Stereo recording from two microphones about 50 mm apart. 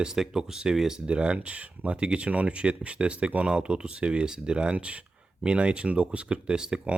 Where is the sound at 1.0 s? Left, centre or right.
Right.